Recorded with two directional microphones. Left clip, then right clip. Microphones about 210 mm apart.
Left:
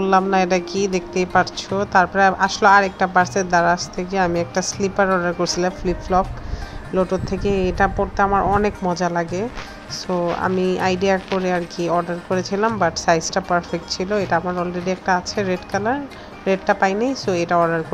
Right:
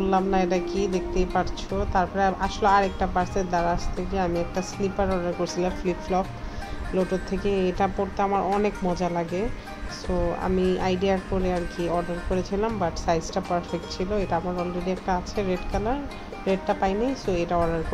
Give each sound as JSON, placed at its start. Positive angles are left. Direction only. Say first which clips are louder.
{"t": 0.0, "sound": "speech", "louder": "left 6 dB", "side_deg": 15}